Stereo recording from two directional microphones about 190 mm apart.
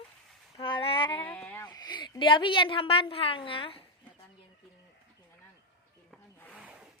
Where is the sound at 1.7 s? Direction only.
20° left (ahead or behind).